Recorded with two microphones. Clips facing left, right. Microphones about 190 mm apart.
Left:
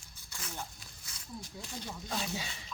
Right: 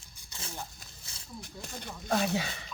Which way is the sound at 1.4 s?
55° right (ahead or behind).